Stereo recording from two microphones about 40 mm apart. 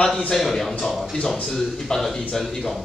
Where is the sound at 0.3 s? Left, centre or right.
Centre.